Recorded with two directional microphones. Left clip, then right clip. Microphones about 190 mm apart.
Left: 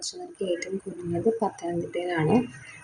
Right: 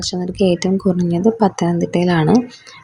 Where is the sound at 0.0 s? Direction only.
35° right (ahead or behind).